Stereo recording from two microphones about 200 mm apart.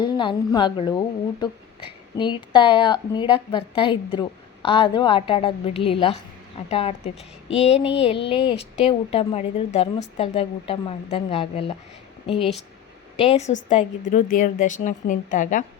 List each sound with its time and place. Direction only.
0.0 s a woman's voice: 25° left (ahead or behind); by 15.6 s 40° left (ahead or behind)